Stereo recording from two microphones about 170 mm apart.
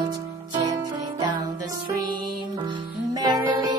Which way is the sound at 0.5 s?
25° right (ahead or behind).